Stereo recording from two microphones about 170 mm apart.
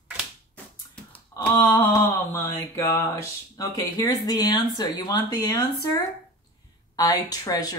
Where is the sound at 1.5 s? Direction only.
15° left (ahead or behind).